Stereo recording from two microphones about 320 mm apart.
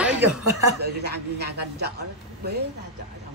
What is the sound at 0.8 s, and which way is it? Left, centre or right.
A man's voice, right.